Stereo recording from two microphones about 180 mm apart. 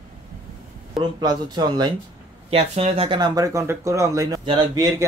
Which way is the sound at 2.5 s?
35° right (ahead or behind).